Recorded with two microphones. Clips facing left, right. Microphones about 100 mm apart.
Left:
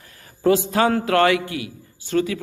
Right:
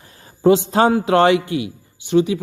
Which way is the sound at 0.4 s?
20° right (ahead or behind).